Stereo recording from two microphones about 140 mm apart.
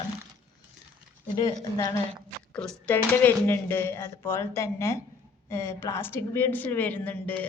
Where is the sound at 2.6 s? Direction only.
10° left (ahead or behind).